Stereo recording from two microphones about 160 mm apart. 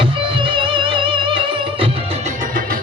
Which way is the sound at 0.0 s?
30° right (ahead or behind).